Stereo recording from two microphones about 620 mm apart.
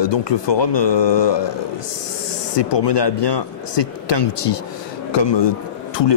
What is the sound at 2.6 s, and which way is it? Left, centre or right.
Speech, left.